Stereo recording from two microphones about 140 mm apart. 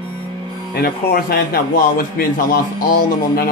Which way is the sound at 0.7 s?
90° left.